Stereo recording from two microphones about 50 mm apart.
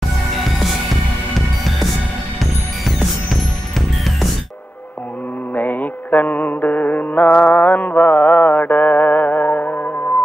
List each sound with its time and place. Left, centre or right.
5.5 s music: left